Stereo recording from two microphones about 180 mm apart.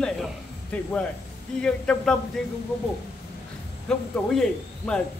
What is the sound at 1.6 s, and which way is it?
Speech, 5° left (ahead or behind).